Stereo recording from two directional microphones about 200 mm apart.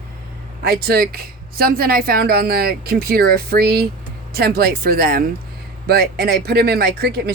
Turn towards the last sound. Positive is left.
turn(degrees=-50)  # may be behind; listen again after turning